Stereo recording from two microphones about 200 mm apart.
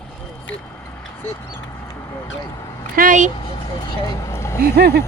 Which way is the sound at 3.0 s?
40° right (ahead or behind).